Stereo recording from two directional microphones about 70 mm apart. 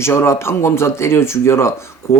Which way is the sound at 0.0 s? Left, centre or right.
Left.